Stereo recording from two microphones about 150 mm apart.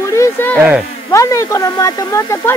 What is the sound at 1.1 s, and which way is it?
Speech, 20° left (ahead or behind).